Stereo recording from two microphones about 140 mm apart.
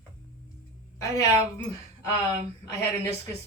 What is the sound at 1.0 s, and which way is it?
Speech, 25° left (ahead or behind).